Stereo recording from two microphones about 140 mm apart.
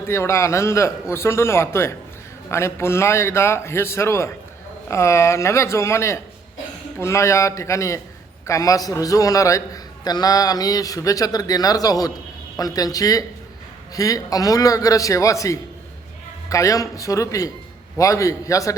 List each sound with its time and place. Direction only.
0.1 s a man's voice: 20° left (ahead or behind)